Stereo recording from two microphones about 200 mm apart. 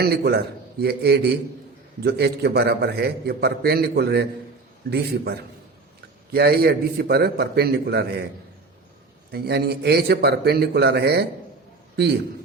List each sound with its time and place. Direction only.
0.0 s a man's voice: 55° right (ahead or behind)
9.3 s a man's voice: 55° right (ahead or behind)